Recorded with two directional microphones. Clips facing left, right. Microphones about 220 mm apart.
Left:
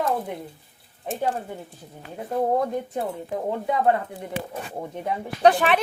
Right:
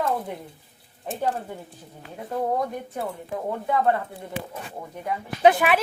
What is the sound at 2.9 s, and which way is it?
Speech, 15° left (ahead or behind).